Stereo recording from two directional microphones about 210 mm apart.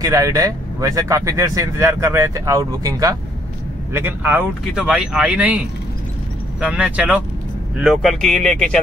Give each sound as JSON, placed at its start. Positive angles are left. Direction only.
{"t": 0.0, "sound": "speech", "side_deg": -15}
{"t": 6.6, "sound": "speech", "side_deg": -5}